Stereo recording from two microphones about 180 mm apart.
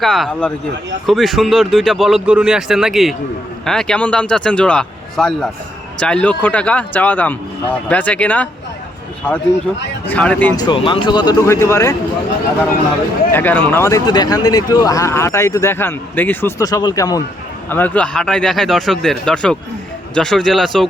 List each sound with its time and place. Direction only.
0.0 s speech: centre (ahead or behind)
10.1 s speech: 10° left (ahead or behind)
10.6 s speech: 25° left (ahead or behind)
13.3 s speech: 10° left (ahead or behind)